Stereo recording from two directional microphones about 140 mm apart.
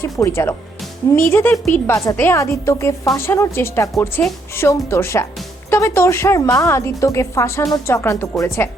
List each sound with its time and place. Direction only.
0.0 s a woman's voice: 20° left (ahead or behind)